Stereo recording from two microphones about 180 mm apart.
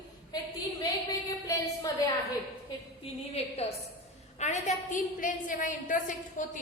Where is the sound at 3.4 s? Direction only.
35° left (ahead or behind).